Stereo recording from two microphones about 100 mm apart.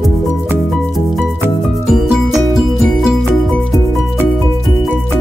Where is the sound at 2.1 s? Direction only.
Centre (ahead or behind).